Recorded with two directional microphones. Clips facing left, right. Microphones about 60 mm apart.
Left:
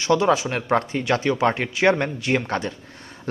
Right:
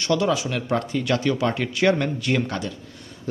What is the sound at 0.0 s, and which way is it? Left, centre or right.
Speech, left.